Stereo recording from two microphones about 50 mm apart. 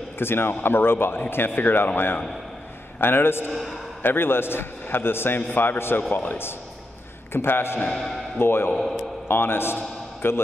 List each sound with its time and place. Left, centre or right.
0.2 s a man's voice: left
3.0 s a man's voice: left
7.3 s a man's voice: left
7.9 s a man's voice: centre
8.4 s a man's voice: left
8.7 s a man's voice: centre
9.3 s a man's voice: left